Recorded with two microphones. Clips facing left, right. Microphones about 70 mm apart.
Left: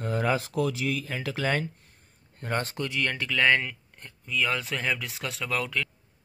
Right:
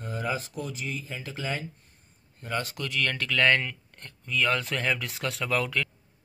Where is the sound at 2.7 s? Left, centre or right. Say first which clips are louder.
Left 1 dB; left; by 5.9 s centre.